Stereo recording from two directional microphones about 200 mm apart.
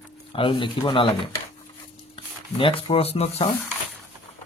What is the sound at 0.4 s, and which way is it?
Speech, 25° left (ahead or behind).